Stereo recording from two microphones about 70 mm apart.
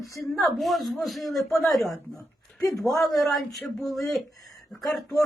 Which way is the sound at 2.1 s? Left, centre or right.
Left.